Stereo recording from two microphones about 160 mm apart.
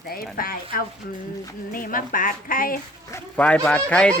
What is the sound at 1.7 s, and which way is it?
A woman's voice, 60° left (ahead or behind).